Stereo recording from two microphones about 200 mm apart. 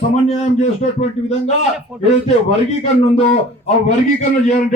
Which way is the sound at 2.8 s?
35° left (ahead or behind).